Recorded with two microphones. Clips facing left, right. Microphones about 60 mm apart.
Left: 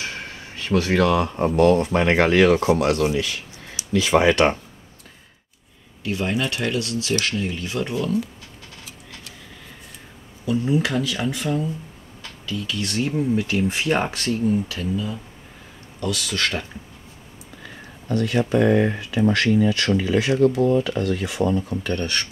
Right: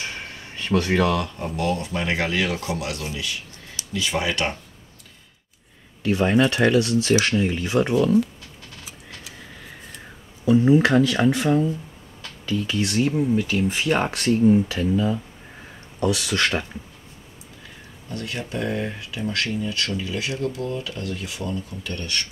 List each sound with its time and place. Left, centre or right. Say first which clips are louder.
0.2 s a sound: even; centre
1.1 s speech: left 6 dB; left
1.6 s speech: left 8 dB; left
3.8 s a sound: left 1 dB; centre
4.1 s speech: left 9 dB; left
6.0 s speech: right 5 dB; right
10.4 s speech: right 6 dB; right
10.8 s speech: right 5 dB; right
12.4 s speech: right 4 dB; right
12.8 s speech: even; centre
14.0 s speech: right 4 dB; centre; by 14.9 s right
16.0 s speech: right 3 dB; right
18.0 s speech: left 10 dB; left
21.5 s speech: left 7 dB; left